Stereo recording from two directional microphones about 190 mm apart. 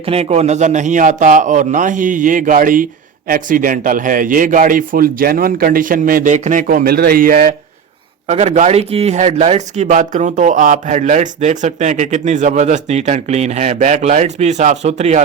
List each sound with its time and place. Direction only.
0.0 s a man's voice: 30° right (ahead or behind)